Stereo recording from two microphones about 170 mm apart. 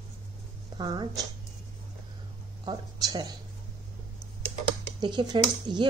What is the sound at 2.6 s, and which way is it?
Speech, 25° right (ahead or behind).